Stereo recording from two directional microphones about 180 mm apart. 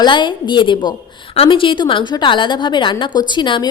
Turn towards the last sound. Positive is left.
turn(degrees=25)  # may be behind; listen again after turning